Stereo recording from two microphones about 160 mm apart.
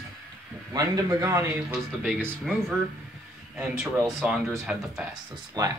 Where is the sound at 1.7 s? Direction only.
5° right (ahead or behind).